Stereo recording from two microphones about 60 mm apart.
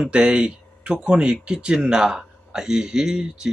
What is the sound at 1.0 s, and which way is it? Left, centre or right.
A man's voice, centre.